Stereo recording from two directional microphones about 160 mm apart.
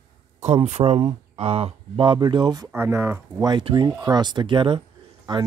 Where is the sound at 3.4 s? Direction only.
25° right (ahead or behind).